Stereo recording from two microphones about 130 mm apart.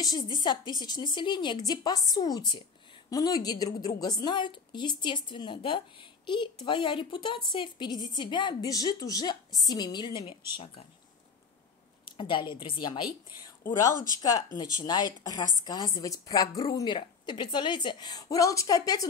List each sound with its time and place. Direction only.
0.0 s a woman's voice: 35° left (ahead or behind); by 10.9 s 50° left (ahead or behind)
12.2 s a woman's voice: 35° left (ahead or behind)
14.6 s a woman's voice: 30° left (ahead or behind)